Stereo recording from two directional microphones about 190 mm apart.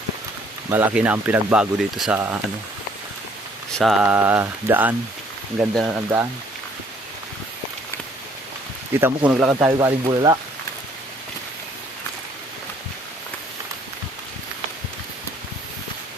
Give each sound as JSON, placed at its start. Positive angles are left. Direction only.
{"t": 0.7, "sound": "speech", "side_deg": -10}
{"t": 3.8, "sound": "speech", "side_deg": 0}
{"t": 9.0, "sound": "speech", "side_deg": -10}
{"t": 9.7, "sound": "speech", "side_deg": -20}